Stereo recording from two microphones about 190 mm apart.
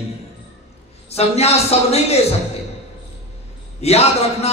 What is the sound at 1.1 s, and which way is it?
A man's voice, 35° left (ahead or behind).